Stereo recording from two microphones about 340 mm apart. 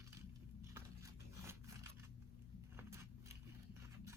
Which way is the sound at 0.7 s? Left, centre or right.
Centre.